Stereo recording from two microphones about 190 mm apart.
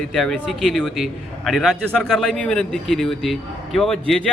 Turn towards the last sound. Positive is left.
turn(degrees=0)  # may be behind; listen again after turning